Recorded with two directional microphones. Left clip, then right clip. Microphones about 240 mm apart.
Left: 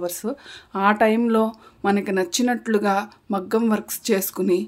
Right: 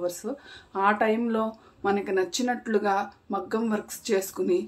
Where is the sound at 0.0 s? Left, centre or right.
Left.